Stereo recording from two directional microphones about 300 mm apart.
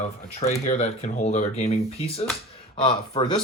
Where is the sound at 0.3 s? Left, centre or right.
Left.